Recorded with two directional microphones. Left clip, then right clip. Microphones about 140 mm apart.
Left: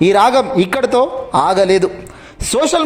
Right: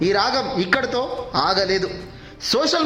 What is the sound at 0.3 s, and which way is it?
Speech, 35° left (ahead or behind).